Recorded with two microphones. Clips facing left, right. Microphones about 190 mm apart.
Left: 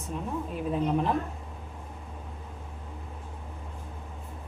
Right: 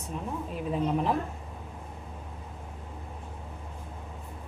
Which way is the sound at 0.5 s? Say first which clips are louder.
Left 1 dB; centre (ahead or behind).